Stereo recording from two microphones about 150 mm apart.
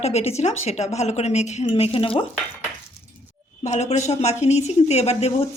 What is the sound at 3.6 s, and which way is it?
A woman's voice, 50° left (ahead or behind).